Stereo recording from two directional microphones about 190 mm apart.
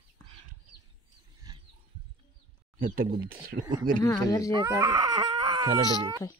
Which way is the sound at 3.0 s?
50° right (ahead or behind).